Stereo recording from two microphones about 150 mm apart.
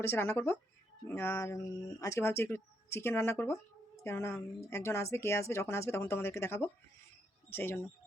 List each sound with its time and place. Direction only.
0.0 s speech: 15° left (ahead or behind)